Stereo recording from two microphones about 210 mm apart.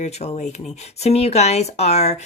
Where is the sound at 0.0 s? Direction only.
30° left (ahead or behind).